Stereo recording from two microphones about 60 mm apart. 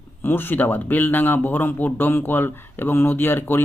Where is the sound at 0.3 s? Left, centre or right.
Left.